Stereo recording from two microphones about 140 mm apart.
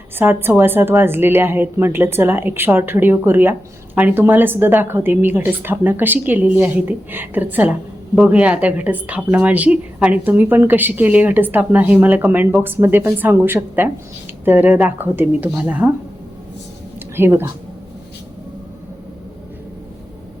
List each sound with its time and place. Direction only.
0.2 s a woman's voice: 15° right (ahead or behind)
17.2 s a woman's voice: 15° right (ahead or behind)